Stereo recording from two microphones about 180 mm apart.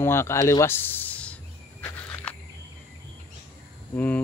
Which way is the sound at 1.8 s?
15° left (ahead or behind).